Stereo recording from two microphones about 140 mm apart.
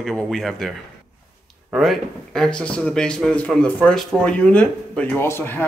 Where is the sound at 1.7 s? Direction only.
Centre (ahead or behind).